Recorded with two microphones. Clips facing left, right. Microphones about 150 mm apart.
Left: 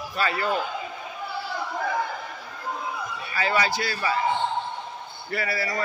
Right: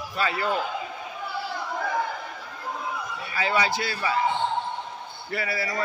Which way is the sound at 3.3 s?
20° right (ahead or behind).